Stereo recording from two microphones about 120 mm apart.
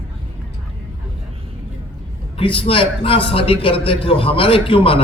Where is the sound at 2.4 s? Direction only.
50° left (ahead or behind).